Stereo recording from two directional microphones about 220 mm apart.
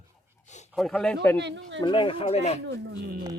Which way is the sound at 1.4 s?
55° right (ahead or behind).